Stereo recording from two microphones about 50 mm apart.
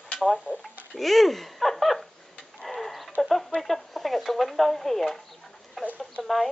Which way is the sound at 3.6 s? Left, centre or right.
Centre.